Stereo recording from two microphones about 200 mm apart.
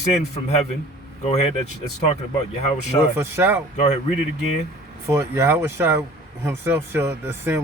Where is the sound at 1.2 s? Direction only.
35° left (ahead or behind).